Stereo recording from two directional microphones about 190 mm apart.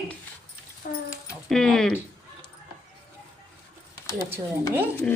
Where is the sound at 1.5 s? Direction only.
Centre (ahead or behind).